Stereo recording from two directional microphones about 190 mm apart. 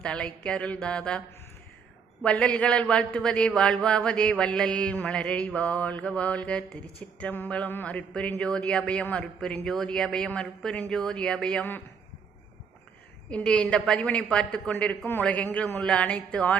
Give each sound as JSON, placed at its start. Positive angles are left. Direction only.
{"t": 0.0, "sound": "a man's voice", "side_deg": 5}
{"t": 2.2, "sound": "a man's voice", "side_deg": 5}
{"t": 13.3, "sound": "a man's voice", "side_deg": 5}